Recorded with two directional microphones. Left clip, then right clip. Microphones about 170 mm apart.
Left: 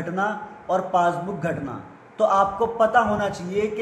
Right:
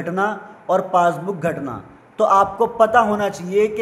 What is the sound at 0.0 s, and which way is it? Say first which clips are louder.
A man's voice: right 4 dB; 45° right (ahead or behind).